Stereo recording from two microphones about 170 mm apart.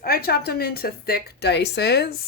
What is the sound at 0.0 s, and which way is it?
A woman's voice, 65° left (ahead or behind).